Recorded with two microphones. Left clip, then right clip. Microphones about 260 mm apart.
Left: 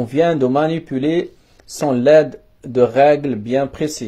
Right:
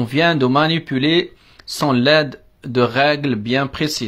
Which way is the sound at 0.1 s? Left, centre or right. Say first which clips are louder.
Even; right.